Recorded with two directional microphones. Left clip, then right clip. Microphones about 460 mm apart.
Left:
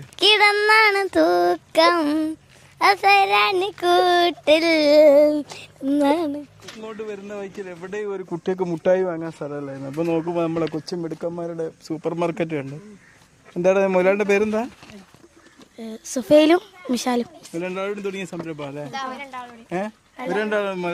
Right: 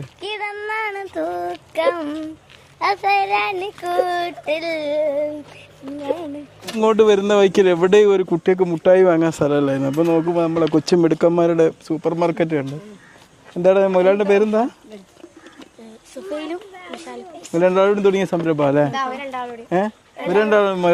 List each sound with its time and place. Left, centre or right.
0.2 s child singing: left
2.7 s a child's voice: left
6.8 s a man's voice: right
8.0 s speech: centre
8.4 s speech: centre
9.0 s speech: centre
9.9 s speech: centre
10.8 s speech: centre
11.9 s speech: centre
17.5 s speech: centre
18.9 s a child's voice: left
19.7 s speech: centre